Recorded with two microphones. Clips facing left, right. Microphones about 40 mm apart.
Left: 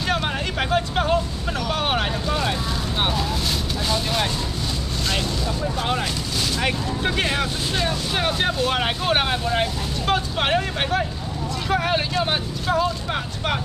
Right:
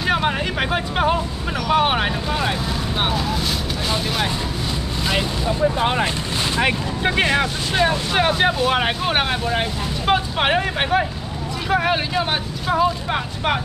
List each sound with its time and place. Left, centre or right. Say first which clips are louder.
0.0 s vehicle: right 4 dB; centre
1.7 s speech: right 6 dB; centre
5.0 s speech: right 4 dB; centre